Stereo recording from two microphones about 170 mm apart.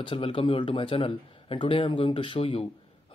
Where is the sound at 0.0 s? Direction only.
30° left (ahead or behind).